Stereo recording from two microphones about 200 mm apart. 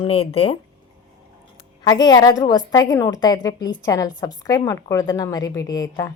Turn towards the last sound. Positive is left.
turn(degrees=20)  # may be behind; listen again after turning